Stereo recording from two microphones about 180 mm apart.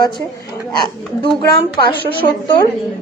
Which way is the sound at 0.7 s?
25° left (ahead or behind).